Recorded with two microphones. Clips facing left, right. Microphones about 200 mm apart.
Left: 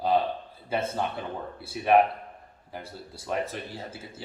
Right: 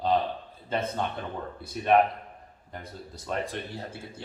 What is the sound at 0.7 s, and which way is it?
Speech, 5° left (ahead or behind).